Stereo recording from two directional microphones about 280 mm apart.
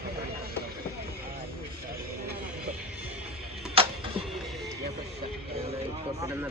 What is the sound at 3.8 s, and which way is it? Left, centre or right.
Music, centre.